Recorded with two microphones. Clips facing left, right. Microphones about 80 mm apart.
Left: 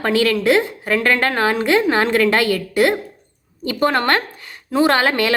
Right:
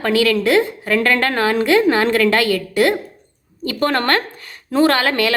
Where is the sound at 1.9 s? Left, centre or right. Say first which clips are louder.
Right 1 dB; left.